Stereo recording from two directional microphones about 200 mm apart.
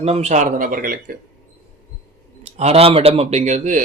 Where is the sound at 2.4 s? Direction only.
35° right (ahead or behind).